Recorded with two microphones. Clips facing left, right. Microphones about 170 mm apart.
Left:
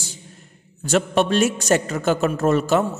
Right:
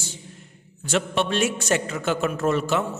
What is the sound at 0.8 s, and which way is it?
A man's voice, 45° left (ahead or behind).